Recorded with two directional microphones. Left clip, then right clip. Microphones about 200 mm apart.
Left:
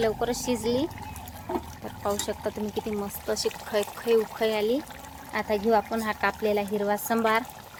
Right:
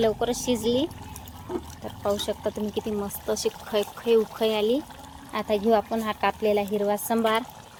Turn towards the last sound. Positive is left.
turn(degrees=-5)  # may be behind; listen again after turning